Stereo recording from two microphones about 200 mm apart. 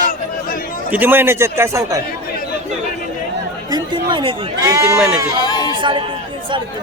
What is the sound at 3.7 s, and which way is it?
Speech, 20° right (ahead or behind).